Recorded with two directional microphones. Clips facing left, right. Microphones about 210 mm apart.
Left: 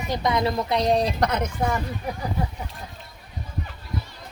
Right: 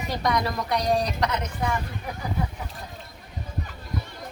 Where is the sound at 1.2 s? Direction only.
50° left (ahead or behind).